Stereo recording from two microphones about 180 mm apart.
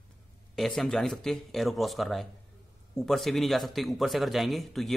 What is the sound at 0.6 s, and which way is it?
A man's voice, centre (ahead or behind).